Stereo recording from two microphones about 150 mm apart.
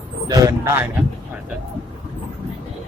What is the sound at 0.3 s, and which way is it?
Speech, 20° right (ahead or behind).